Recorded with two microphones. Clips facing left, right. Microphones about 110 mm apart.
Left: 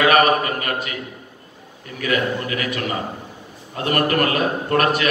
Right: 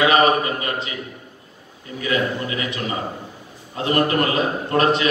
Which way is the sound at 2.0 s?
25° right (ahead or behind).